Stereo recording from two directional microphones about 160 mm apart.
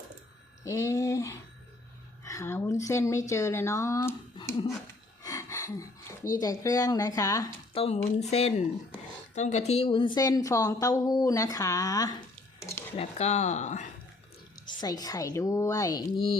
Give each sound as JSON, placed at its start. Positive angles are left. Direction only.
{"t": 0.6, "sound": "speech", "side_deg": 20}
{"t": 5.2, "sound": "a sound", "side_deg": 20}
{"t": 6.2, "sound": "speech", "side_deg": 20}
{"t": 7.7, "sound": "speech", "side_deg": 35}
{"t": 13.0, "sound": "speech", "side_deg": 45}
{"t": 14.8, "sound": "speech", "side_deg": 25}